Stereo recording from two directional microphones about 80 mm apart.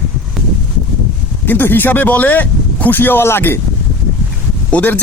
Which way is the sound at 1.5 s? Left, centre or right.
Left.